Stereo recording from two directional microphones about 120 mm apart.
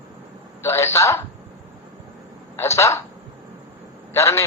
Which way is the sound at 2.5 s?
20° left (ahead or behind).